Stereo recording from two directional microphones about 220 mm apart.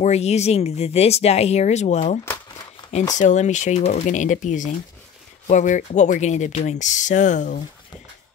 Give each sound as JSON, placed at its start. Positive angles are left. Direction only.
{"t": 0.0, "sound": "speech", "side_deg": 30}
{"t": 3.2, "sound": "speech", "side_deg": 35}